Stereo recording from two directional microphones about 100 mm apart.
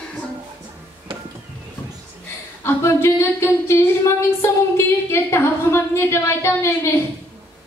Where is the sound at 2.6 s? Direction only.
25° left (ahead or behind).